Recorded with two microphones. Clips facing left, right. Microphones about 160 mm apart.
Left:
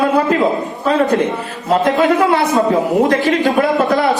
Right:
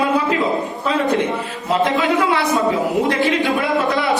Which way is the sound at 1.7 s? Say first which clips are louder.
Left 4 dB; 45° left (ahead or behind).